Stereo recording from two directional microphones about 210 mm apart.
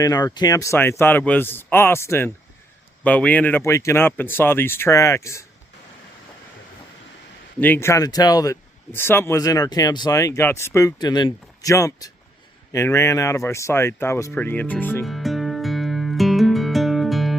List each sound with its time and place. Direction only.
0.0 s speech: 15° left (ahead or behind)
7.6 s speech: 10° left (ahead or behind)
12.7 s a sound: 15° left (ahead or behind)